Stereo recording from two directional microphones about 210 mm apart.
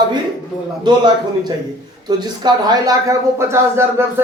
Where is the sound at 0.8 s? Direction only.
20° right (ahead or behind).